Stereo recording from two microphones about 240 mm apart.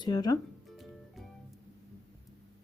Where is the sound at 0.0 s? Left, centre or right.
Centre.